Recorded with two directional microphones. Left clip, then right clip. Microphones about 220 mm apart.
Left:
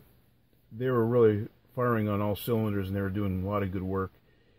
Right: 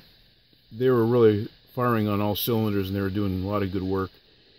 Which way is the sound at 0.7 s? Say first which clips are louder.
Right 4 dB; 40° right (ahead or behind).